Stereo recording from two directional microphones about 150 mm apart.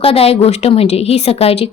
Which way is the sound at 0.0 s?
40° left (ahead or behind).